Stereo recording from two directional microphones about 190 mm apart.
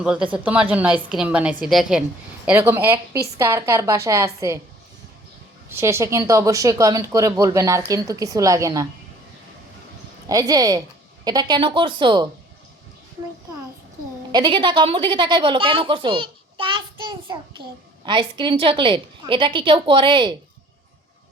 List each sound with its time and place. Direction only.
0.0 s a woman's voice: 5° right (ahead or behind)
5.6 s speech: 15° right (ahead or behind)
10.2 s a woman's voice: 20° right (ahead or behind)
14.3 s a woman's voice: 25° right (ahead or behind)